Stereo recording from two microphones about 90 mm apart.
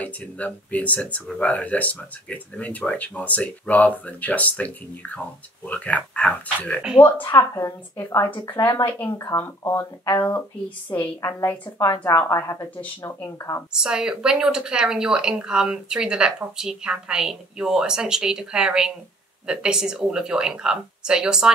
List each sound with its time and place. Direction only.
0.0 s speech: 15° left (ahead or behind)
7.2 s a woman's voice: 35° left (ahead or behind)
11.1 s a woman's voice: 35° left (ahead or behind)
13.7 s speech: 5° right (ahead or behind)